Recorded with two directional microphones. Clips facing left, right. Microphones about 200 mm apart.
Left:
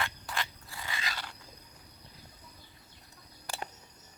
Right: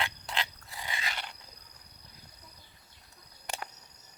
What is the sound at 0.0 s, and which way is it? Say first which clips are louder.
Frog: right 1 dB; 20° right (ahead or behind).